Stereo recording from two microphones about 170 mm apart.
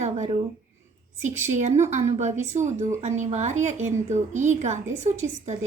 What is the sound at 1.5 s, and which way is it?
A woman's voice, 45° right (ahead or behind).